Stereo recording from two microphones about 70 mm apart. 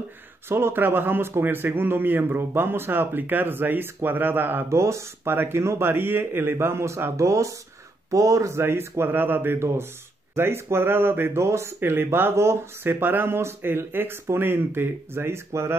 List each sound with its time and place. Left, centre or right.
0.5 s speech: right
4.6 s speech: right